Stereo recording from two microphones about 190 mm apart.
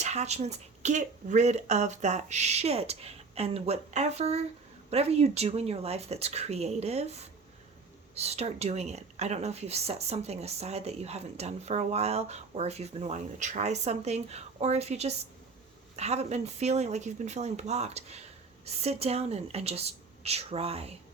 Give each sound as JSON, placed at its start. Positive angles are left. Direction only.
{"t": 0.0, "sound": "a woman's voice", "side_deg": -35}